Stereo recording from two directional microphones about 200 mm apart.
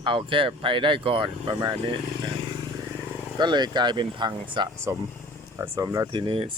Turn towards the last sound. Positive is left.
turn(degrees=-25)  # may be behind; listen again after turning